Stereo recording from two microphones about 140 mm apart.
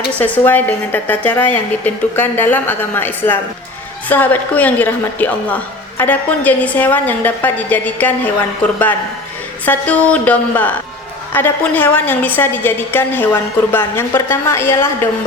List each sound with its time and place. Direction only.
0.2 s a woman's voice: 15° left (ahead or behind)
9.6 s a woman's voice: 10° left (ahead or behind)